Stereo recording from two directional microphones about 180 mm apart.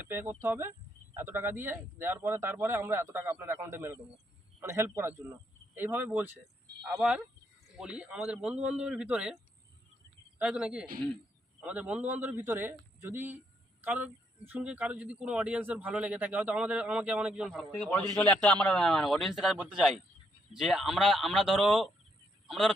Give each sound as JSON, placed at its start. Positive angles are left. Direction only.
{"t": 0.0, "sound": "a man's voice", "side_deg": -10}